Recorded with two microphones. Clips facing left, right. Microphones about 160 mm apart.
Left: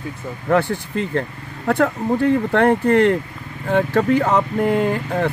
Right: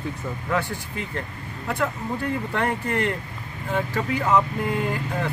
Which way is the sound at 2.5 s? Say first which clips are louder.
Left 10 dB; 65° left (ahead or behind).